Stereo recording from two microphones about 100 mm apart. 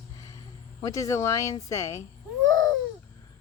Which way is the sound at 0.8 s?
35° left (ahead or behind).